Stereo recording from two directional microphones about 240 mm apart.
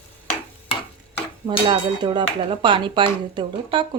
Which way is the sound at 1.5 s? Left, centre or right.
Centre.